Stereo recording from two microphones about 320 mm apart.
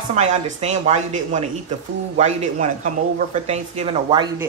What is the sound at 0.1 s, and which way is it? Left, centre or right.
A woman's voice, right.